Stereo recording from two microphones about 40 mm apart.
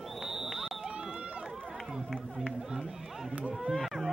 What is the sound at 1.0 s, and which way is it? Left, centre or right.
Run, right.